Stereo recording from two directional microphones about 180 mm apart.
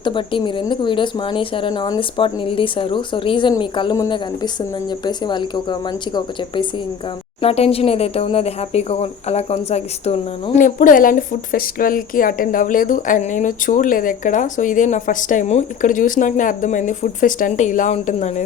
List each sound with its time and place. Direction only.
0.0 s speech: 25° left (ahead or behind)
7.4 s speech: 35° left (ahead or behind)
10.6 s speech: 50° left (ahead or behind)